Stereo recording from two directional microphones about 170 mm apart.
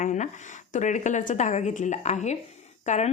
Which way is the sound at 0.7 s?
45° left (ahead or behind).